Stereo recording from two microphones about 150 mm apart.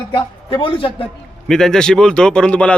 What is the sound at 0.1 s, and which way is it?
Speech, 35° left (ahead or behind).